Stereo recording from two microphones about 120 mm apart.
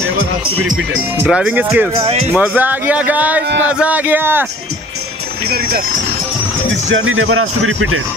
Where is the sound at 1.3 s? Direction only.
10° right (ahead or behind).